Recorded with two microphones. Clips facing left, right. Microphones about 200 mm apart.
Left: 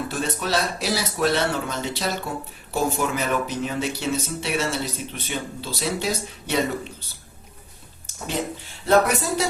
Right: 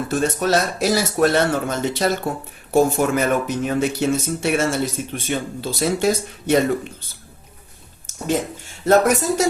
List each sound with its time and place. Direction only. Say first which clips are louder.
0.1 s speech: right 10 dB; 45° right (ahead or behind)
8.0 s speech: right 6 dB; 45° right (ahead or behind)